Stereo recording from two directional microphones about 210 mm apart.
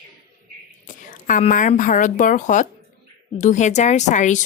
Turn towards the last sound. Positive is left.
turn(degrees=35)  # may be behind; listen again after turning